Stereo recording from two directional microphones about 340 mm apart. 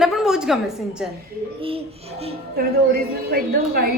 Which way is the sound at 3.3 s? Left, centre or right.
Right.